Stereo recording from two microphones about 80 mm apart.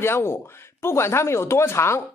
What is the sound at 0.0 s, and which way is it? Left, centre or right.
A man's voice, left.